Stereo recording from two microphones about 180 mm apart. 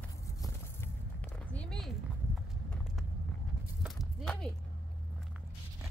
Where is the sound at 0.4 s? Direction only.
10° left (ahead or behind).